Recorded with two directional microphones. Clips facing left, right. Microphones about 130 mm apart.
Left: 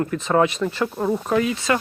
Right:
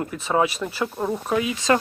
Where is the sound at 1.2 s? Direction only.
5° right (ahead or behind).